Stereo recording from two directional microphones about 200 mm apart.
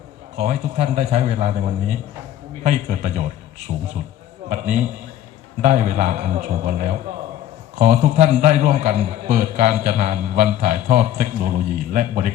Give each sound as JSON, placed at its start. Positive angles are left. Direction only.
{"t": 0.3, "sound": "a man's voice", "side_deg": -35}